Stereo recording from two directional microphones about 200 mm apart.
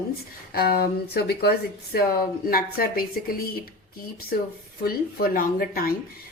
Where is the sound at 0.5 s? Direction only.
50° left (ahead or behind).